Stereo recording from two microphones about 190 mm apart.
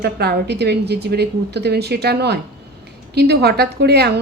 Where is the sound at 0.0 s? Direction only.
60° right (ahead or behind).